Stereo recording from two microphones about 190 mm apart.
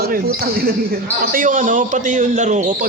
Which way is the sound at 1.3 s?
45° right (ahead or behind).